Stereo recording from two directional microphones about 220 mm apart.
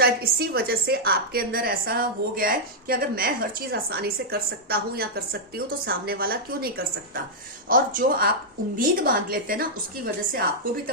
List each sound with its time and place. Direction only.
0.0 s a woman's voice: 45° right (ahead or behind)